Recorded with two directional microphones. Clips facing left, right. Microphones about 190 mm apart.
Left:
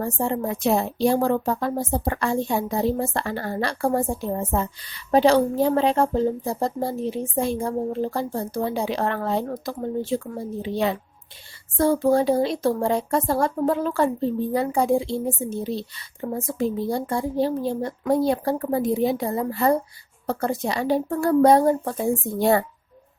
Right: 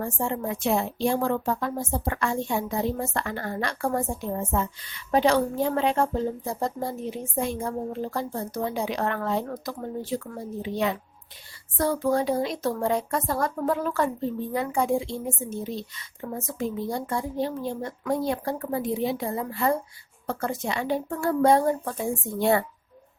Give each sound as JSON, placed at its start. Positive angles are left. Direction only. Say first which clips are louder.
{"t": 0.0, "sound": "speech", "louder": "left 4 dB", "side_deg": 35}